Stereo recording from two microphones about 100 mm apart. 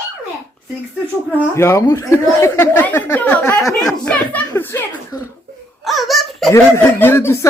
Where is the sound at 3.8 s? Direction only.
10° left (ahead or behind).